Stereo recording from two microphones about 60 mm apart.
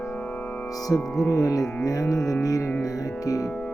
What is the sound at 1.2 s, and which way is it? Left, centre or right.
Music, left.